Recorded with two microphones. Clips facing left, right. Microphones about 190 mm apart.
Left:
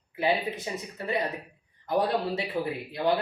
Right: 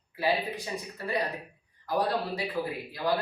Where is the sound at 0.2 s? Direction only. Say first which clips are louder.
Left 2 dB; 20° left (ahead or behind).